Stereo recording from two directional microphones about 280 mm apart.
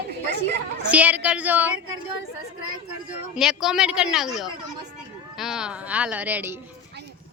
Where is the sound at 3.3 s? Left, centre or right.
Centre.